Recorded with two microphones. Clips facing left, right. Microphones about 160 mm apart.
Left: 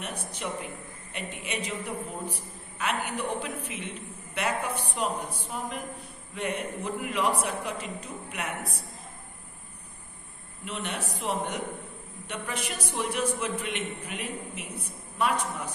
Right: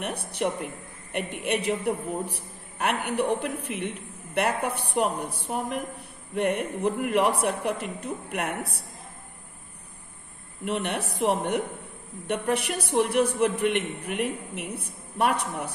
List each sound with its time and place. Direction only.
0.3 s a woman's voice: 60° right (ahead or behind)
10.6 s a woman's voice: 60° right (ahead or behind)